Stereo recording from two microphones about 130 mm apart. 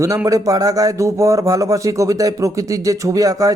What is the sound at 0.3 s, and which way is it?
Speech, 25° right (ahead or behind).